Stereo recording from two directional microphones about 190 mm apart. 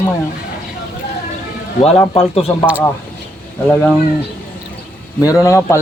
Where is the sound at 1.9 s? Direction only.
30° left (ahead or behind).